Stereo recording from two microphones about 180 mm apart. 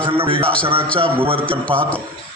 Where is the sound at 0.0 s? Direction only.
30° right (ahead or behind).